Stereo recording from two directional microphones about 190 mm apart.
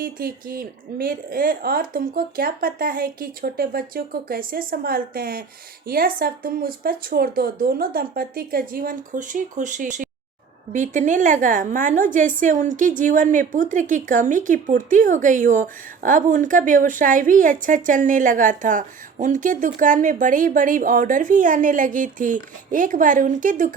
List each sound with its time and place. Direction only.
0.0 s a woman's voice: 50° right (ahead or behind)